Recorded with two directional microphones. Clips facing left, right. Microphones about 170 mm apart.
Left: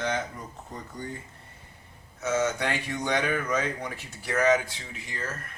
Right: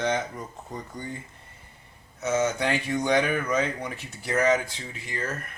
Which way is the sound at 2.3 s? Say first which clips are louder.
Right 2 dB; 15° right (ahead or behind).